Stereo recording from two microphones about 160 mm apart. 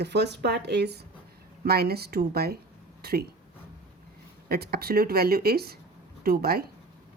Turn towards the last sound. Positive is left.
turn(degrees=-70)  # may be behind; listen again after turning